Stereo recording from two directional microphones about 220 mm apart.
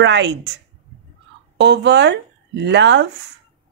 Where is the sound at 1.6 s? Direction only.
50° right (ahead or behind).